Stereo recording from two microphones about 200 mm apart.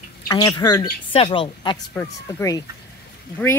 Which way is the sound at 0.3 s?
15° left (ahead or behind).